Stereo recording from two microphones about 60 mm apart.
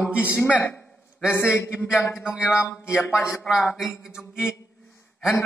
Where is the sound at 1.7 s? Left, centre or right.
Centre.